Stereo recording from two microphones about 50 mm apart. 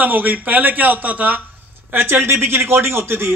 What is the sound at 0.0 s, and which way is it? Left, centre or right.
A man's voice, right.